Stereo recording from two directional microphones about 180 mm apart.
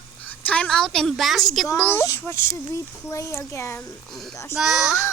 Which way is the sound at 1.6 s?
15° left (ahead or behind).